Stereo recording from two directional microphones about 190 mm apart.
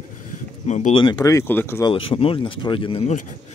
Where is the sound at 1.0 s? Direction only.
20° left (ahead or behind).